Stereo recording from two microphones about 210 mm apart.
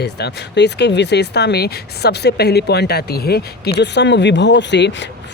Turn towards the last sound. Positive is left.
turn(degrees=60)  # may be behind; listen again after turning